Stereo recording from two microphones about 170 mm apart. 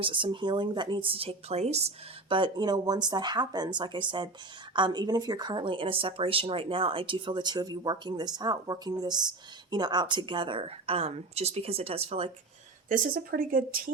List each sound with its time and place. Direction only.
0.0 s speech: 30° right (ahead or behind)
2.3 s a woman's voice: 25° right (ahead or behind)
12.9 s speech: 55° right (ahead or behind)